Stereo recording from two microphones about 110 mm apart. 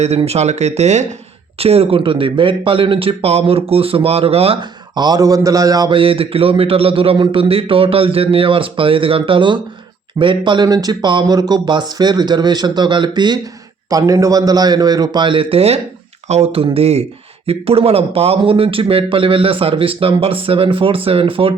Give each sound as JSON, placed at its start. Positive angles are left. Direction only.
{"t": 0.3, "sound": "speech", "side_deg": -90}
{"t": 1.5, "sound": "a man's voice", "side_deg": -65}
{"t": 4.9, "sound": "speech", "side_deg": -40}
{"t": 5.9, "sound": "a man's voice", "side_deg": -55}
{"t": 13.9, "sound": "a man's voice", "side_deg": -30}